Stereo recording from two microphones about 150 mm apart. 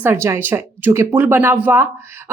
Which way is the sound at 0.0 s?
15° right (ahead or behind).